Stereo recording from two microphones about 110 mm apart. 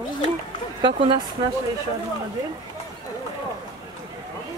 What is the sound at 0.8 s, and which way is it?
Speech, 50° right (ahead or behind).